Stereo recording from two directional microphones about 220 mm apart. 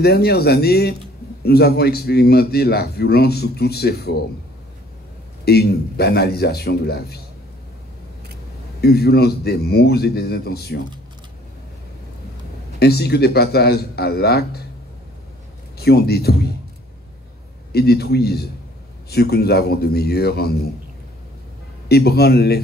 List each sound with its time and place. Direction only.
0.0 s a man's voice: 45° left (ahead or behind)
5.4 s a man's voice: 45° left (ahead or behind)
8.8 s a man's voice: 45° left (ahead or behind)
12.7 s a man's voice: 45° left (ahead or behind)
15.8 s a man's voice: 45° left (ahead or behind)
17.7 s a man's voice: 45° left (ahead or behind)
21.8 s a man's voice: 45° left (ahead or behind)